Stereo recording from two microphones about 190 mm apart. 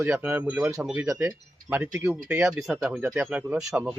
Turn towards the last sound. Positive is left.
turn(degrees=0)  # may be behind; listen again after turning